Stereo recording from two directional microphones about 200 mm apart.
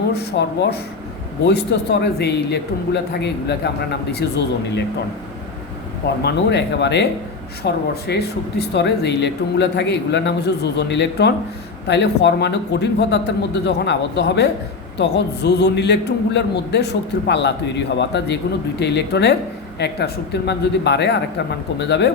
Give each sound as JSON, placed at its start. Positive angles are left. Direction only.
{"t": 0.1, "sound": "speech", "side_deg": 55}
{"t": 6.2, "sound": "speech", "side_deg": 60}